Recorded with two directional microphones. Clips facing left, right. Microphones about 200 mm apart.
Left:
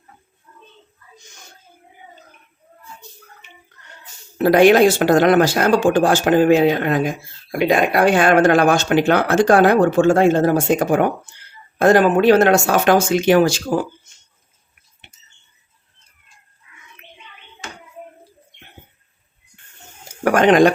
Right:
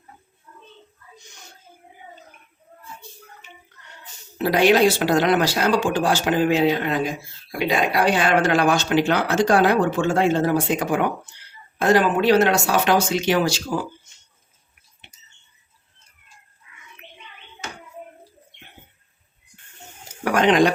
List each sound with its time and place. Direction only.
4.4 s speech: 50° left (ahead or behind)
20.2 s speech: 50° left (ahead or behind)